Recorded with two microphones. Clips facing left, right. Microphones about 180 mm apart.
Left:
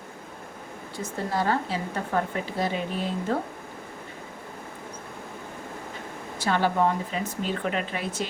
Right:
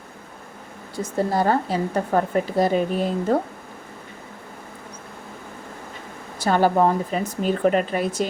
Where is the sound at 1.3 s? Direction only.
45° right (ahead or behind).